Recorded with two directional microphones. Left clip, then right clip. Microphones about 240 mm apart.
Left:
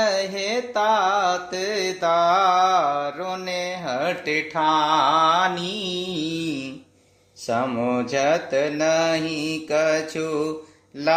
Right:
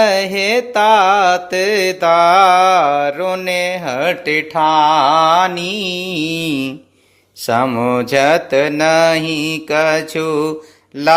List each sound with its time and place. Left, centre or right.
0.0 s music: right